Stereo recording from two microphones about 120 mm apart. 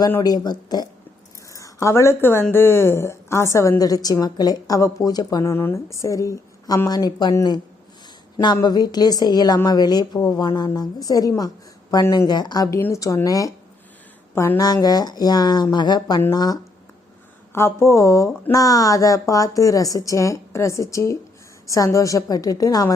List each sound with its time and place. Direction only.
0.2 s a woman's voice: 35° left (ahead or behind)
8.6 s a woman's voice: 35° left (ahead or behind)
12.8 s a woman's voice: 25° left (ahead or behind)
14.7 s a woman's voice: 35° left (ahead or behind)
17.5 s a woman's voice: 20° left (ahead or behind)